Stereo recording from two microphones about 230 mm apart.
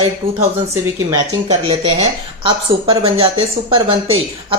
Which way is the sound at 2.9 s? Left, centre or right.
Right.